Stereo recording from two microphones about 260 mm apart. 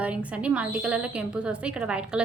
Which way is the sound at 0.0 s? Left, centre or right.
Centre.